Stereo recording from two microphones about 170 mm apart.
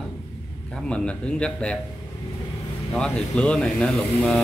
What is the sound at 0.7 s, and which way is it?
Speech, 5° left (ahead or behind).